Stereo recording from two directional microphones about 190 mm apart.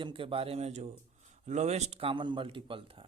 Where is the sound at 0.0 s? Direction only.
30° right (ahead or behind).